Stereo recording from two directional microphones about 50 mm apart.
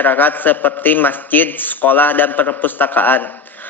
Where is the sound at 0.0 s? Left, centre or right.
Left.